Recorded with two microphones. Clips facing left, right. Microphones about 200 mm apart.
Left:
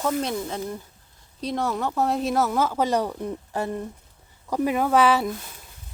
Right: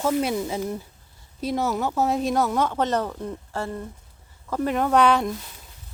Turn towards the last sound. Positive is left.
turn(degrees=5)  # may be behind; listen again after turning